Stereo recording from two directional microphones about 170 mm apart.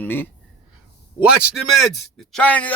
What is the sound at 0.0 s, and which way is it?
Speech, 10° left (ahead or behind).